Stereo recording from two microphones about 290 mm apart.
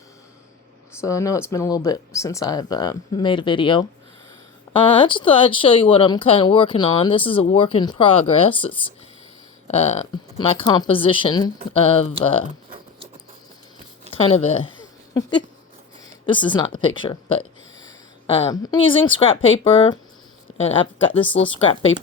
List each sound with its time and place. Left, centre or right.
1.0 s speech: centre
14.1 s speech: centre
15.1 s a sound: centre
16.2 s speech: centre
21.6 s speech: centre